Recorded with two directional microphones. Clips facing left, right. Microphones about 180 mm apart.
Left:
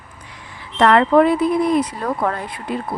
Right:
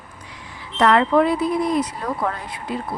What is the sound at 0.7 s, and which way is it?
Speech, 55° left (ahead or behind).